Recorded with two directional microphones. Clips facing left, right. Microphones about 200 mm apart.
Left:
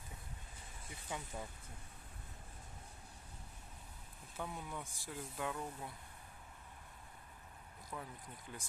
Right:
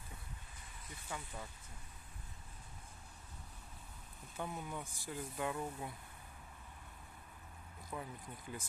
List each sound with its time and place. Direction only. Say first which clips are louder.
1.0 s speech: left 2 dB; 15° left (ahead or behind)
4.4 s speech: right 2 dB; centre (ahead or behind)
7.9 s speech: right 2 dB; 5° right (ahead or behind)